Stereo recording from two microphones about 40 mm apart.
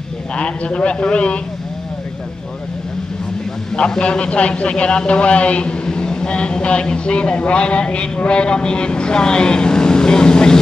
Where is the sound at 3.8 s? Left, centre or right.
Left.